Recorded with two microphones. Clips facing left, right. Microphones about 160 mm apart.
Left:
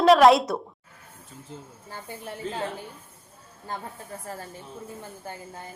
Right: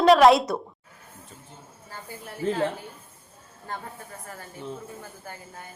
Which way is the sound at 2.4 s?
65° right (ahead or behind).